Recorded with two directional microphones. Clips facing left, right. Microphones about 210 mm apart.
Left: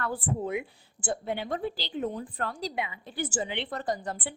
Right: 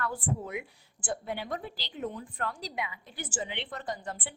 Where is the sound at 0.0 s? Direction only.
30° left (ahead or behind).